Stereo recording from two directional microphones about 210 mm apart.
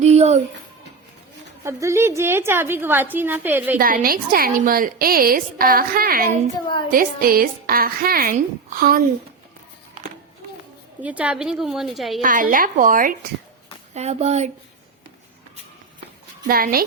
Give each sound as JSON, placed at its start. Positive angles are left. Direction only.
{"t": 0.0, "sound": "music", "side_deg": -30}
{"t": 1.6, "sound": "a woman's voice", "side_deg": -15}
{"t": 3.8, "sound": "a woman's voice", "side_deg": -45}
{"t": 11.0, "sound": "a woman's voice", "side_deg": -5}
{"t": 12.2, "sound": "a woman's voice", "side_deg": -40}
{"t": 13.9, "sound": "a woman's voice", "side_deg": -30}
{"t": 16.5, "sound": "a woman's voice", "side_deg": -45}